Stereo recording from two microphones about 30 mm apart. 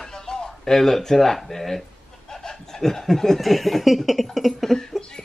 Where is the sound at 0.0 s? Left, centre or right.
Centre.